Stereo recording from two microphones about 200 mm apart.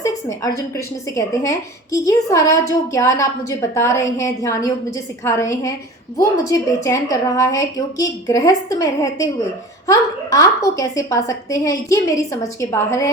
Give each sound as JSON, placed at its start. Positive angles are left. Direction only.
{"t": 0.0, "sound": "a woman's voice", "side_deg": 15}